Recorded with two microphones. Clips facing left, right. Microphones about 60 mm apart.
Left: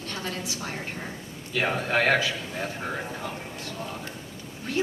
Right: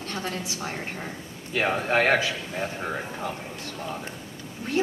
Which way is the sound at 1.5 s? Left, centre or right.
Right.